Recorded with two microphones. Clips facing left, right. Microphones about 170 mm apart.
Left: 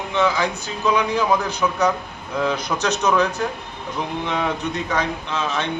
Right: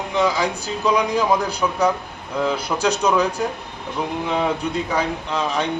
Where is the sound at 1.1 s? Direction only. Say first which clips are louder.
Right 1 dB; 35° right (ahead or behind).